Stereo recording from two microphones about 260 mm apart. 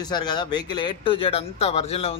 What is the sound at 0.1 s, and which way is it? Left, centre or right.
Speech, centre.